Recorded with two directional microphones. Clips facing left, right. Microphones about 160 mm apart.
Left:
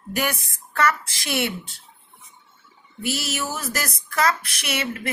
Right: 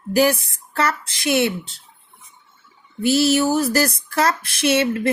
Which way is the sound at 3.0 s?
30° right (ahead or behind).